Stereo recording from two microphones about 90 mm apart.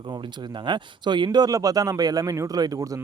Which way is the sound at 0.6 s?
55° right (ahead or behind).